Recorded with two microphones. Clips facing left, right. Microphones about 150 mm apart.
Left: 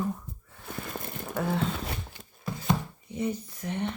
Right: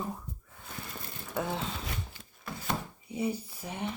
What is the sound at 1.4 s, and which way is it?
Speech, centre (ahead or behind).